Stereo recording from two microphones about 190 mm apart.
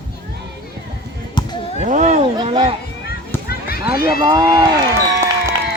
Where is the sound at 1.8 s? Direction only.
40° right (ahead or behind).